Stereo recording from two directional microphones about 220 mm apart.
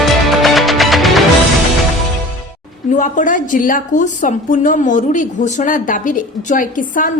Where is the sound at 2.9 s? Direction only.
35° left (ahead or behind).